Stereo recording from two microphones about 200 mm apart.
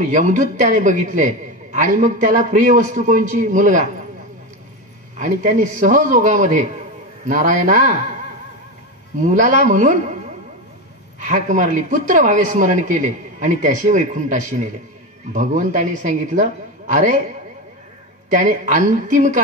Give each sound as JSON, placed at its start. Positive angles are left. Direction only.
{"t": 0.0, "sound": "a man's voice", "side_deg": -40}
{"t": 5.2, "sound": "a man's voice", "side_deg": -40}
{"t": 9.2, "sound": "a man's voice", "side_deg": -40}
{"t": 11.1, "sound": "a man's voice", "side_deg": -40}
{"t": 18.3, "sound": "a man's voice", "side_deg": -40}